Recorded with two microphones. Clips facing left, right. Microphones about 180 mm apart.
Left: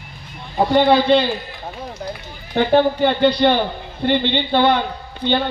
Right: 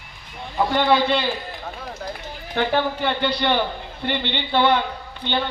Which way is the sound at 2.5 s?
30° left (ahead or behind).